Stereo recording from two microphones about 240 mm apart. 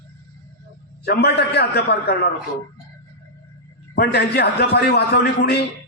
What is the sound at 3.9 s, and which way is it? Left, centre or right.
A man's voice, left.